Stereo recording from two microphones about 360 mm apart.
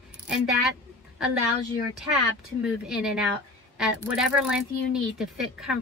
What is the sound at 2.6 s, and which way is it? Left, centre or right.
Speech, centre.